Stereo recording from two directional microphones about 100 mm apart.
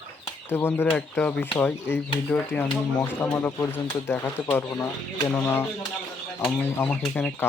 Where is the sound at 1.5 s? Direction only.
25° left (ahead or behind).